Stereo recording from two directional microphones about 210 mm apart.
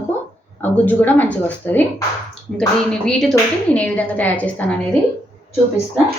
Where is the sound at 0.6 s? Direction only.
10° left (ahead or behind).